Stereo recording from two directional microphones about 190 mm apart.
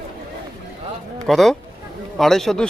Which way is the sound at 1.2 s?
Centre (ahead or behind).